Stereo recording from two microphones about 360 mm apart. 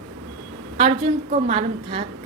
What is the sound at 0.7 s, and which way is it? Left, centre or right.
A woman's voice, centre.